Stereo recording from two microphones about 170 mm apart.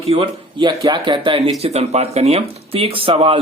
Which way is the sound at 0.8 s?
25° right (ahead or behind).